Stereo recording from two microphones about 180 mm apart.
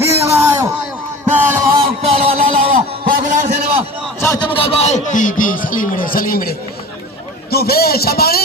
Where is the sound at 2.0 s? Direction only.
35° right (ahead or behind).